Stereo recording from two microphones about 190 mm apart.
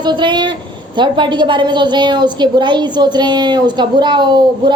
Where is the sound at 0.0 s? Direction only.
25° right (ahead or behind).